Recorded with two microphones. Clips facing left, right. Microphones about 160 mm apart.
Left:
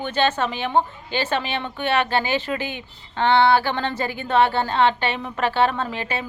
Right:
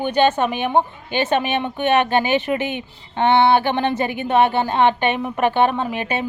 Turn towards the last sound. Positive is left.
turn(degrees=-20)  # may be behind; listen again after turning